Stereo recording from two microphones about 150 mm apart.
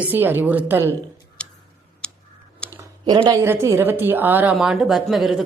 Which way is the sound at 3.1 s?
25° right (ahead or behind).